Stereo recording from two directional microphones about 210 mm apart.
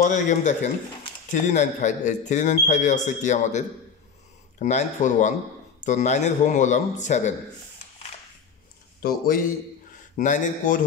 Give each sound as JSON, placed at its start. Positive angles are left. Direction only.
{"t": 0.0, "sound": "a man's voice", "side_deg": 35}
{"t": 9.0, "sound": "a man's voice", "side_deg": 45}